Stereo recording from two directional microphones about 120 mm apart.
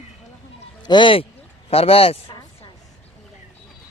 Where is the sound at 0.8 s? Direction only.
40° left (ahead or behind).